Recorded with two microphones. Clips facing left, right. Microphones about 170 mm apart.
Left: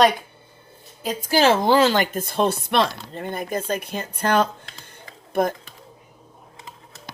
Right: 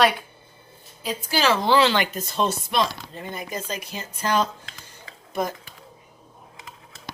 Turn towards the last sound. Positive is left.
turn(degrees=55)  # may be behind; listen again after turning